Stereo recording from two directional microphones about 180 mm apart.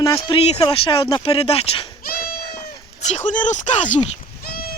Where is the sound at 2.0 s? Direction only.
55° left (ahead or behind).